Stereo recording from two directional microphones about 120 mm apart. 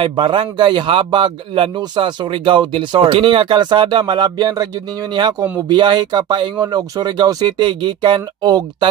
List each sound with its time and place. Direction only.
0.0 s a man's voice: 45° right (ahead or behind)
5.7 s speech: 40° right (ahead or behind)